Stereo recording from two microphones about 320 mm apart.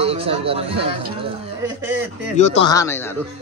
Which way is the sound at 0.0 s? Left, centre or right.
Centre.